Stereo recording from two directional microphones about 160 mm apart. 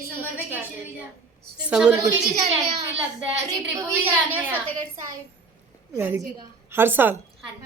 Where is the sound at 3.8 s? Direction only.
10° right (ahead or behind).